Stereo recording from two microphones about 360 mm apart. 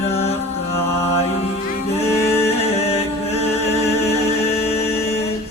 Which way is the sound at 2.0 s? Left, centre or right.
Centre.